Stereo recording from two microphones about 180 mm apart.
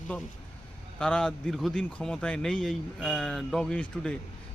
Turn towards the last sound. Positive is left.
turn(degrees=5)  # may be behind; listen again after turning